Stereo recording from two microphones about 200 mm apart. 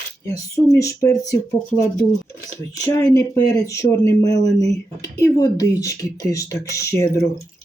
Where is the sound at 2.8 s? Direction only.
15° left (ahead or behind).